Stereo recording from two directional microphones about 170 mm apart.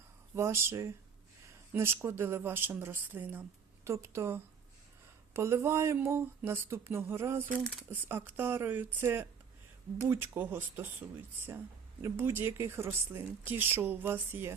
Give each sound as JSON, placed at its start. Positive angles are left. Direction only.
{"t": 0.3, "sound": "speech", "side_deg": -15}
{"t": 12.0, "sound": "speech", "side_deg": -15}